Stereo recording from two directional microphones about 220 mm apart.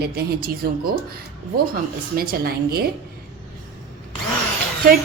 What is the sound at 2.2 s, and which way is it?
Speech, 45° right (ahead or behind).